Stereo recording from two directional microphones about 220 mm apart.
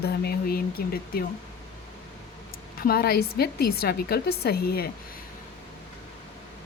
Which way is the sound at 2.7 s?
45° left (ahead or behind).